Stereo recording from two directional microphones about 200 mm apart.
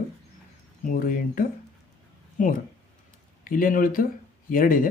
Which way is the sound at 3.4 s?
45° left (ahead or behind).